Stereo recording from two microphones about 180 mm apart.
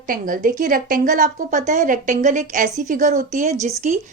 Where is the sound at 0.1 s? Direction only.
50° right (ahead or behind).